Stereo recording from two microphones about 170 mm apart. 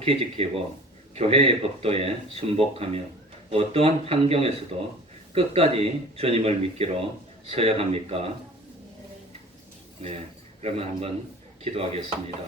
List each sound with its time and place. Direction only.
0.0 s speech: 35° right (ahead or behind)
10.6 s speech: 35° right (ahead or behind)